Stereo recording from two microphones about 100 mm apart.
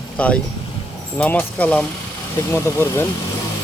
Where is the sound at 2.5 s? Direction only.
25° left (ahead or behind).